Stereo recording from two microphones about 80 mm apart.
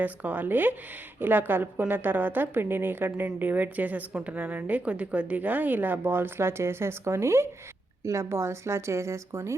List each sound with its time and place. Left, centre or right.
0.0 s a woman's voice: right